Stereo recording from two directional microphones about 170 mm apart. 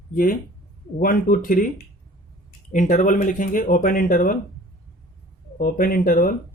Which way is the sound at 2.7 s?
50° left (ahead or behind).